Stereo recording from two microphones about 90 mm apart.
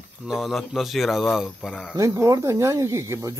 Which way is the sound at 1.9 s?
35° right (ahead or behind).